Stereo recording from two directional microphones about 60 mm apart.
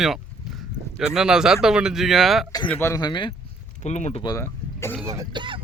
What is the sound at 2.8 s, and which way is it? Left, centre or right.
Speech, left.